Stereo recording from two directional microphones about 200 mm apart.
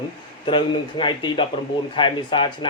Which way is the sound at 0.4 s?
25° left (ahead or behind).